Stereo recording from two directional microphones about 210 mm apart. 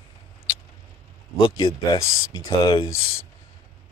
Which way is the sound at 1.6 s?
25° left (ahead or behind).